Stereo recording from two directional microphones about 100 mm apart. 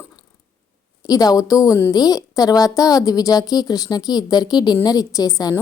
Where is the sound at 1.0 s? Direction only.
40° left (ahead or behind).